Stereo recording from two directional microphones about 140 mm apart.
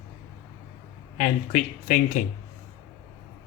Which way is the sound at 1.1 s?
65° left (ahead or behind).